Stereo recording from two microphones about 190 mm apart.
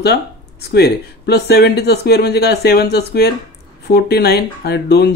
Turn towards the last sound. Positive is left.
turn(degrees=60)  # may be behind; listen again after turning